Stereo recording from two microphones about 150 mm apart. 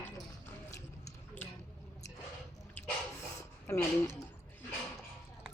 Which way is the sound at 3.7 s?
20° left (ahead or behind).